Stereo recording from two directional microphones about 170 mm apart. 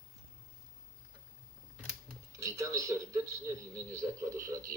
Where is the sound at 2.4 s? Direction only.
20° right (ahead or behind).